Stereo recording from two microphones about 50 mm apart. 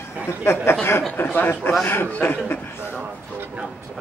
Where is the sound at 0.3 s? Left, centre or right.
Left.